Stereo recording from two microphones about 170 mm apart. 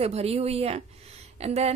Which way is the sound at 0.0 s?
35° right (ahead or behind).